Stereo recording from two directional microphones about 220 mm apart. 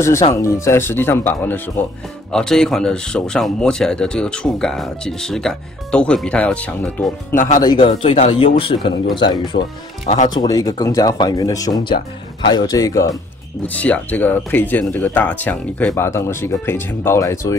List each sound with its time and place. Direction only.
0.3 s speech: 10° left (ahead or behind)
7.6 s speech: 20° left (ahead or behind)
9.5 s speech: 40° left (ahead or behind)
10.3 s speech: 15° left (ahead or behind)